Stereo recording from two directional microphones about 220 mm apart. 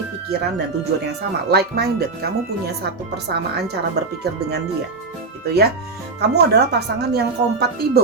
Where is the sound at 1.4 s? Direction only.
45° right (ahead or behind).